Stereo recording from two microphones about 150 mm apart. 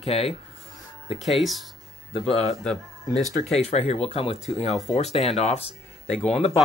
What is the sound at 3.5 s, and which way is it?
Speech, 45° left (ahead or behind).